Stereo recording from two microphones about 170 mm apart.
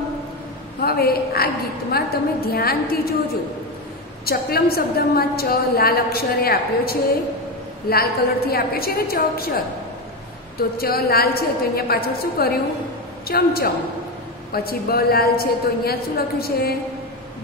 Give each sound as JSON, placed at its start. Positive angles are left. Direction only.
{"t": 0.8, "sound": "a woman's voice", "side_deg": 65}
{"t": 4.3, "sound": "a woman's voice", "side_deg": 65}
{"t": 10.8, "sound": "a woman's voice", "side_deg": 65}